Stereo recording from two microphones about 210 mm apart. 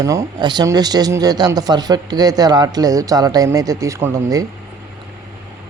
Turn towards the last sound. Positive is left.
turn(degrees=-15)  # may be behind; listen again after turning